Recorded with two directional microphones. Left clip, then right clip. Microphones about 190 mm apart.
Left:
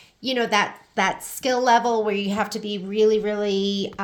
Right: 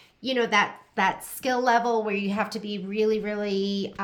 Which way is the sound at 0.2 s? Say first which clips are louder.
Left 2 dB; 30° left (ahead or behind).